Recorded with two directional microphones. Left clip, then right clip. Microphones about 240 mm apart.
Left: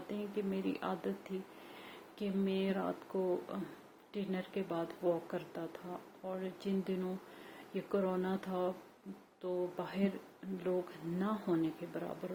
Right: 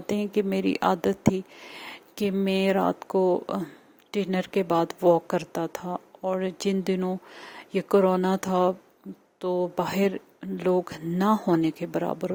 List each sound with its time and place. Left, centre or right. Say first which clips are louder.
0.1 s a woman's voice: right 14 dB; right